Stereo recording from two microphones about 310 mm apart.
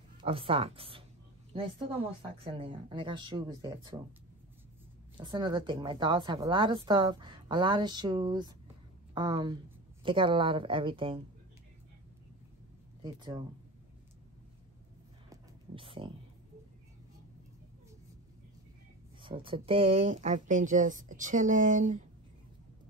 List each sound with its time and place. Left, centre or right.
0.2 s a woman's voice: centre
2.3 s a woman's voice: centre
5.1 s a woman's voice: centre
13.0 s a woman's voice: centre
15.2 s a sound: centre
19.2 s speech: centre